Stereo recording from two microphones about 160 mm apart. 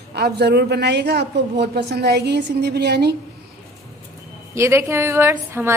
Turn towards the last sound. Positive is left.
turn(degrees=-15)  # may be behind; listen again after turning